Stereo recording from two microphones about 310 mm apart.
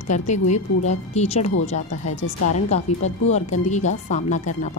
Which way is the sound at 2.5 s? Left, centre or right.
Left.